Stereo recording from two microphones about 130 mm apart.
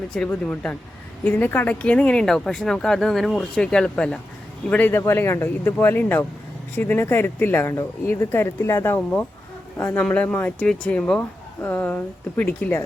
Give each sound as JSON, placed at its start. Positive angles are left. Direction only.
{"t": 0.3, "sound": "speech", "side_deg": 10}